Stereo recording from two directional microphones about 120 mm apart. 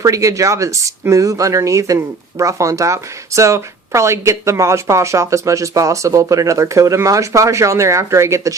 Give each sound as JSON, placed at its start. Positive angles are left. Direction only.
{"t": 0.0, "sound": "speech", "side_deg": -25}